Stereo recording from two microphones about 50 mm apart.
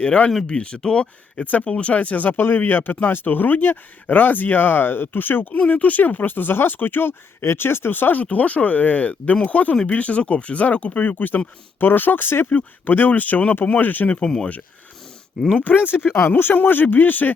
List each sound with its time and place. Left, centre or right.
0.4 s speech: centre; by 5.5 s left
5.5 s speech: left
12.5 s speech: left
14.2 s speech: centre
16.3 s speech: left